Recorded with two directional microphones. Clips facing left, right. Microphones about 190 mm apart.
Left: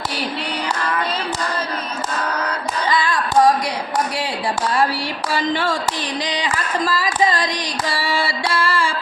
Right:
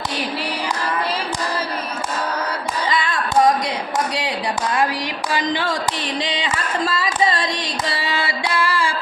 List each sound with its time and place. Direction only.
5.3 s speech: 15° right (ahead or behind)
6.2 s music: 25° right (ahead or behind)